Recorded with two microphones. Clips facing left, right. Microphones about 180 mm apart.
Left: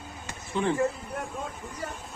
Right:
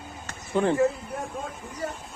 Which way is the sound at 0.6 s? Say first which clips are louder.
Right 4 dB; 45° right (ahead or behind).